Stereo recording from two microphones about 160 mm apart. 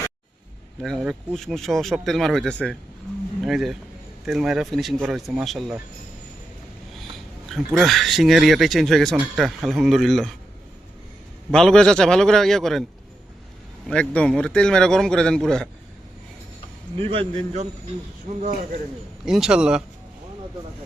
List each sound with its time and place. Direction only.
0.8 s speech: centre (ahead or behind)
7.4 s speech: centre (ahead or behind)
11.5 s speech: 5° left (ahead or behind)
13.8 s speech: 5° left (ahead or behind)
17.0 s a man's voice: 35° right (ahead or behind)
18.3 s a man's voice: 55° right (ahead or behind)
19.2 s speech: 5° right (ahead or behind)